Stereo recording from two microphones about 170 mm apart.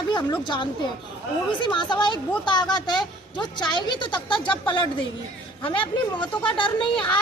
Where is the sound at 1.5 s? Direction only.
25° left (ahead or behind).